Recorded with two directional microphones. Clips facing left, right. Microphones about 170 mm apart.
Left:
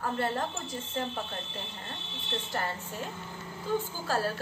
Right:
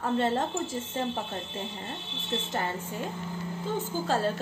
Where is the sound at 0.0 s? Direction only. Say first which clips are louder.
Right 4 dB; 25° right (ahead or behind).